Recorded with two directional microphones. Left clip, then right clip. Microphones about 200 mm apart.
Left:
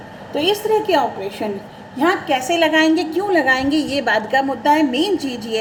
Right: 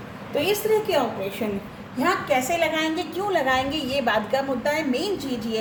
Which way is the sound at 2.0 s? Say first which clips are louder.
Left 4 dB; 45° left (ahead or behind).